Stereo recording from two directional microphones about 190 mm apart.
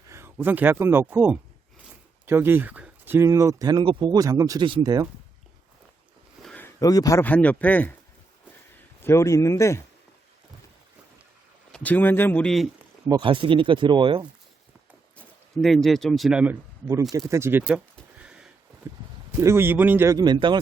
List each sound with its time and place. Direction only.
0.1 s speech: 10° right (ahead or behind)
6.4 s a sound: 5° left (ahead or behind)
6.7 s speech: 20° left (ahead or behind)
9.0 s speech: 15° left (ahead or behind)
11.7 s speech: 10° left (ahead or behind)
13.1 s speech: 25° right (ahead or behind)
15.1 s speech: 5° left (ahead or behind)
18.2 s a sound: 5° right (ahead or behind)
18.8 s speech: 15° right (ahead or behind)